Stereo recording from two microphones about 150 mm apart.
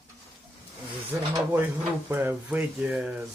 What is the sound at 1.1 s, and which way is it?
Speech, 20° right (ahead or behind).